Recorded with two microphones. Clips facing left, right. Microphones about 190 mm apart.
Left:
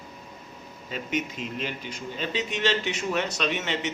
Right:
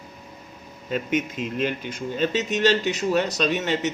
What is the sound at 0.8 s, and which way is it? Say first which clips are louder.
Speech: right 5 dB; 50° right (ahead or behind).